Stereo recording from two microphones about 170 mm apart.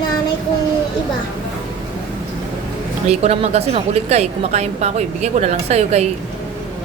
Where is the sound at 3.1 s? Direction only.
40° right (ahead or behind).